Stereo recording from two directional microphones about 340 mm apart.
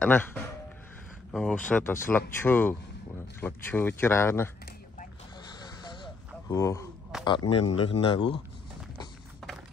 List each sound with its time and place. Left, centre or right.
0.0 s speech: centre
5.6 s a sound: centre
7.2 s speech: centre